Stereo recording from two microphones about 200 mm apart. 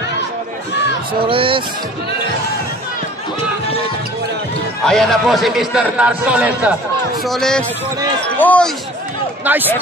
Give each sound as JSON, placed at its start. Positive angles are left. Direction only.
{"t": 1.2, "sound": "speech", "side_deg": -25}
{"t": 4.8, "sound": "a man's voice", "side_deg": 0}
{"t": 9.4, "sound": "a man's voice", "side_deg": -10}